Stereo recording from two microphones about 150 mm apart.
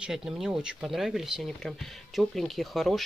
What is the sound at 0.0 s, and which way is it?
Speech, 5° right (ahead or behind).